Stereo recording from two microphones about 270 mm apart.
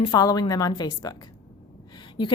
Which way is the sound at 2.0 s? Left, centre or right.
Centre.